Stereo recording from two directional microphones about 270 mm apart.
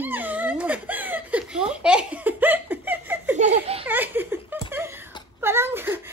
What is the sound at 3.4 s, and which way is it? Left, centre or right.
Speech, right.